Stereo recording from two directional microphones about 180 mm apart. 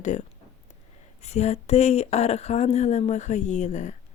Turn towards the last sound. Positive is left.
turn(degrees=40)  # may be behind; listen again after turning